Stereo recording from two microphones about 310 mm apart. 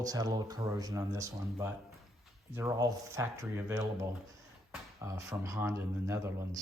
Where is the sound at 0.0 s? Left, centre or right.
Centre.